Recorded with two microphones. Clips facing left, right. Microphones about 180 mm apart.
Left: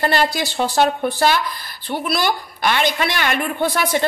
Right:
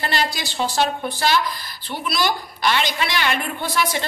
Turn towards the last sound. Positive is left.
turn(degrees=50)  # may be behind; listen again after turning